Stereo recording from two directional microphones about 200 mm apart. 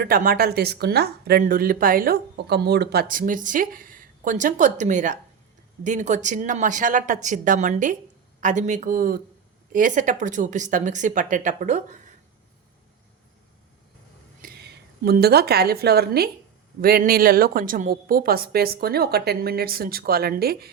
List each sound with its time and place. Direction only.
0.0 s a woman's voice: 45° right (ahead or behind)
14.4 s a woman's voice: 50° right (ahead or behind)